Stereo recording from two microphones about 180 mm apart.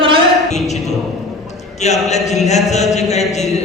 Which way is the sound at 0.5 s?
40° left (ahead or behind).